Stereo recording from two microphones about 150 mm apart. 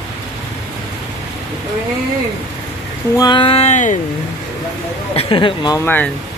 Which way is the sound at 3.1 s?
30° left (ahead or behind).